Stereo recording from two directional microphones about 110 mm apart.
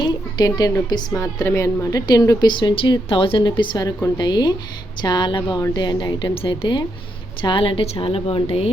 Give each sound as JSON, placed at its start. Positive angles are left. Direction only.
{"t": 0.0, "sound": "a sound", "side_deg": 40}
{"t": 0.9, "sound": "a woman's voice", "side_deg": 35}
{"t": 2.5, "sound": "a woman's voice", "side_deg": 45}